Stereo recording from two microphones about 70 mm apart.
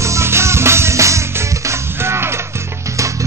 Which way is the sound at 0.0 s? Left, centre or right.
Right.